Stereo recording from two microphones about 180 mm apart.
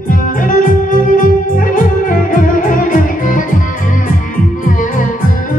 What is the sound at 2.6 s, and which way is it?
Music, 50° left (ahead or behind).